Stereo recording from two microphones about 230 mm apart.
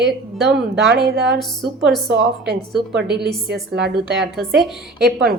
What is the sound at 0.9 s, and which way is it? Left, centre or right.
A woman's voice, right.